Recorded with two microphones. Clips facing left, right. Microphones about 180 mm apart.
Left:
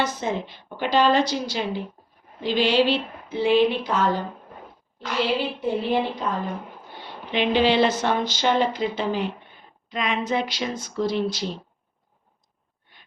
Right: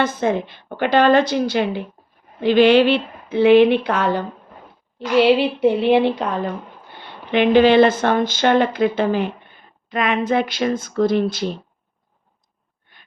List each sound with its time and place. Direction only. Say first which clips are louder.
0.0 s a woman's voice: right 6 dB; 55° right (ahead or behind)
7.3 s speech: right 7 dB; 55° right (ahead or behind)